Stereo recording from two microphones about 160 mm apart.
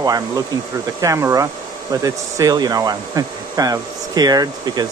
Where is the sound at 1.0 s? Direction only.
20° right (ahead or behind).